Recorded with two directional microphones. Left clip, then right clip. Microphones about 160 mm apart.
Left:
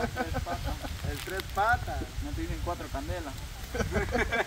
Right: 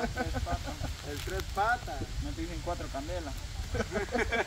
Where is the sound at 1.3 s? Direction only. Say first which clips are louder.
Left 3 dB; 25° left (ahead or behind).